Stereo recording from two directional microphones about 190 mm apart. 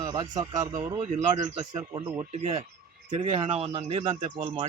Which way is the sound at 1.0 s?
35° right (ahead or behind).